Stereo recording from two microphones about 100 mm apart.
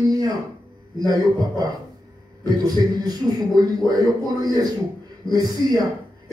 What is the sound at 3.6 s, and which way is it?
A man's voice, 40° right (ahead or behind).